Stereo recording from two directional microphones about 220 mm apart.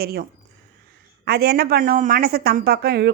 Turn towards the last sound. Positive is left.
turn(degrees=-45)  # may be behind; listen again after turning